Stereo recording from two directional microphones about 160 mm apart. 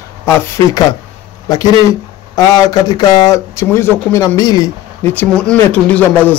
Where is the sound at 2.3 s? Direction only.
25° left (ahead or behind).